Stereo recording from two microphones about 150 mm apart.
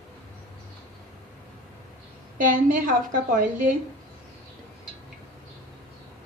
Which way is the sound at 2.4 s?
65° right (ahead or behind).